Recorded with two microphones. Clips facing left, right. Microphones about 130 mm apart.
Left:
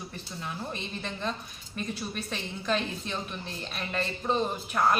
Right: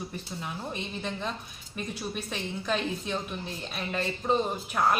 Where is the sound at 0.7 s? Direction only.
5° right (ahead or behind).